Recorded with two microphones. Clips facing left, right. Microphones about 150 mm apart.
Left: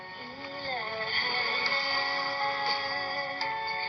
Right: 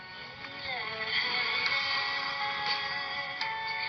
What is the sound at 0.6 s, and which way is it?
Music, 35° left (ahead or behind).